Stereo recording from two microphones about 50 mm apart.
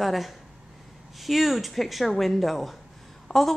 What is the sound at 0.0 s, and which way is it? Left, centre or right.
A woman's voice, centre.